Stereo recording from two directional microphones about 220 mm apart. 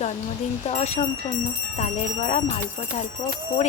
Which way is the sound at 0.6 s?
30° left (ahead or behind).